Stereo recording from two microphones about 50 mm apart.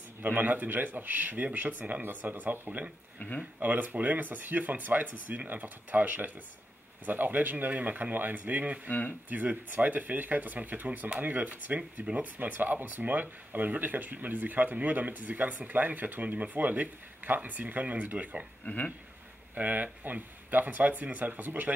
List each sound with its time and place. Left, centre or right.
0.2 s speech: right
3.2 s speech: left
3.5 s speech: right
8.8 s speech: left
9.3 s speech: right
19.5 s speech: right